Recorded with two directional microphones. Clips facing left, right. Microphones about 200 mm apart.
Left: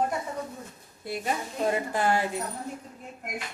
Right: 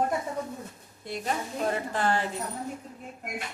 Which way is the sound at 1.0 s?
5° left (ahead or behind).